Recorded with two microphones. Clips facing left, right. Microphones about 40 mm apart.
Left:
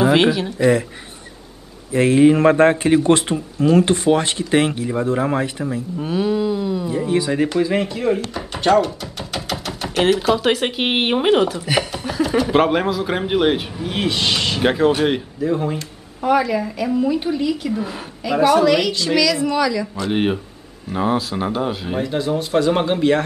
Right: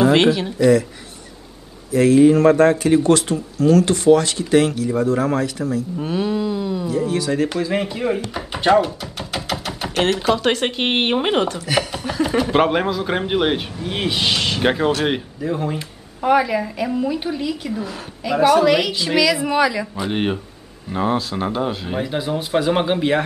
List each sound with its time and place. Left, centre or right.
0.1 s speech: centre
0.6 s speech: left
1.9 s speech: left
5.9 s speech: centre
6.9 s speech: centre
7.5 s speech: centre
7.8 s speech: centre
16.2 s speech: centre
20.1 s speech: centre